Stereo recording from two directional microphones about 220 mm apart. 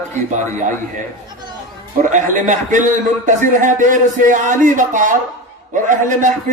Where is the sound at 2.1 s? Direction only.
35° right (ahead or behind).